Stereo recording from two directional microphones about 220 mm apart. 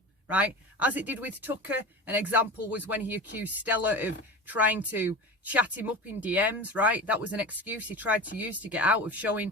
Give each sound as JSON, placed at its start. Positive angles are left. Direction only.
{"t": 0.3, "sound": "speech", "side_deg": -5}